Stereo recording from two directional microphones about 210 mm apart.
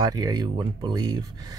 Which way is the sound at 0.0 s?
20° right (ahead or behind).